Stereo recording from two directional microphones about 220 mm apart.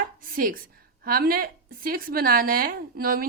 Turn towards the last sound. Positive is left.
turn(degrees=-40)  # may be behind; listen again after turning